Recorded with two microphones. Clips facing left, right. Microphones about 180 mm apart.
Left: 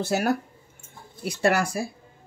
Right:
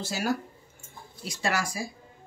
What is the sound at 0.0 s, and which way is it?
Speech, 60° left (ahead or behind).